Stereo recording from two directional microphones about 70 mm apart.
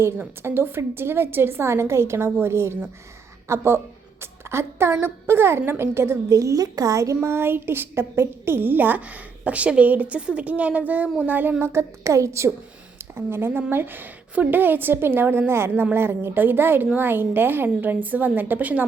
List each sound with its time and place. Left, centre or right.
0.4 s a woman's voice: right
11.6 s a woman's voice: right
13.1 s a woman's voice: right